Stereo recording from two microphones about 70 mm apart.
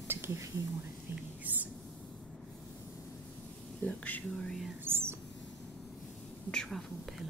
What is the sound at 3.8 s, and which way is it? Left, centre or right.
Speech, left.